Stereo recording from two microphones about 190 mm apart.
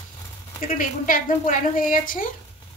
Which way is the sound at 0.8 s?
45° left (ahead or behind).